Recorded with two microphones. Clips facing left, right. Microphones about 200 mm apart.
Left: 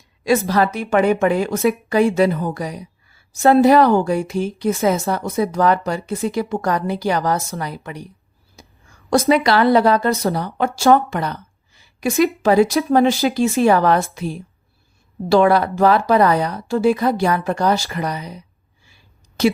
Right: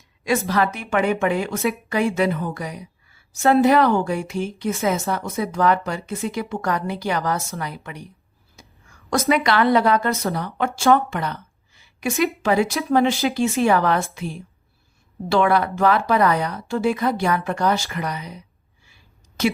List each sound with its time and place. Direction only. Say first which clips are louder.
0.3 s speech: left 4 dB; 35° left (ahead or behind)
9.0 s speech: left 4 dB; 30° left (ahead or behind)